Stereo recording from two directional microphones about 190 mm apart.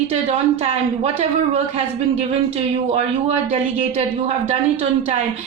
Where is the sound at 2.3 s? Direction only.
35° right (ahead or behind).